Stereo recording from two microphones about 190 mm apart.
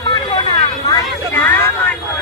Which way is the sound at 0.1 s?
20° left (ahead or behind).